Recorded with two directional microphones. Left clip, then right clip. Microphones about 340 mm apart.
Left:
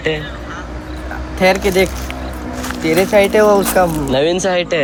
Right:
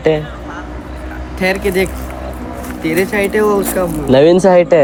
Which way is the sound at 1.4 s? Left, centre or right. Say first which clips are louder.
Left 2 dB; centre.